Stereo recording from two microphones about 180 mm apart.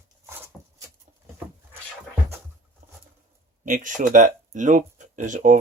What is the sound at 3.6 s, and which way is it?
Speech, 45° right (ahead or behind).